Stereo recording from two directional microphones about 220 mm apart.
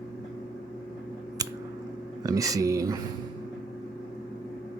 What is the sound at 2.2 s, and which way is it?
Speech, 15° right (ahead or behind).